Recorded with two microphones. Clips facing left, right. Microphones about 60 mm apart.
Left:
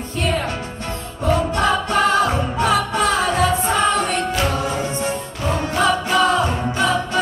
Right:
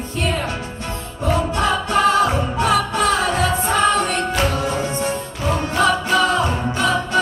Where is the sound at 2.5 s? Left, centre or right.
Left.